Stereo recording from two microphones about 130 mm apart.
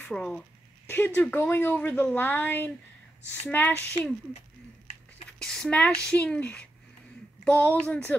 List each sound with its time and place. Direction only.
0.0 s speech: 5° left (ahead or behind)
5.4 s speech: 5° left (ahead or behind)